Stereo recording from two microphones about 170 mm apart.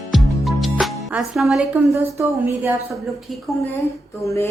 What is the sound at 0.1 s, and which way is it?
Music, centre (ahead or behind).